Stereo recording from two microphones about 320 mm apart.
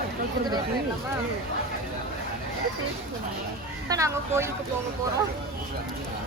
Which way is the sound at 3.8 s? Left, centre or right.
Centre.